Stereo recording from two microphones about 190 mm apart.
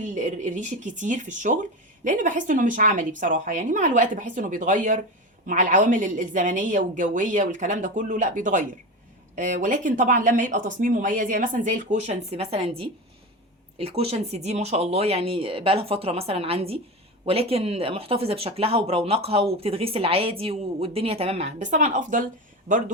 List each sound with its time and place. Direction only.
0.0 s speech: 40° right (ahead or behind)